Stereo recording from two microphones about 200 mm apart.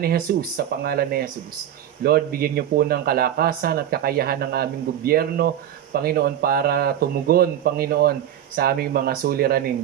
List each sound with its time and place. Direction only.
0.0 s speech: 50° right (ahead or behind)